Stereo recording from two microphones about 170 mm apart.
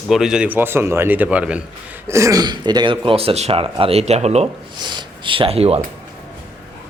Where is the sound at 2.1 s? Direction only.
15° right (ahead or behind); by 4.5 s 40° right (ahead or behind).